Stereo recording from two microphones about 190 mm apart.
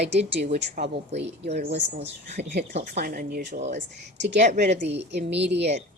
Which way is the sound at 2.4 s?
60° right (ahead or behind).